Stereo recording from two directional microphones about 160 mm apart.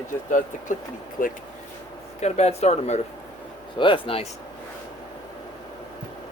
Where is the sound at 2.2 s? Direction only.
45° left (ahead or behind).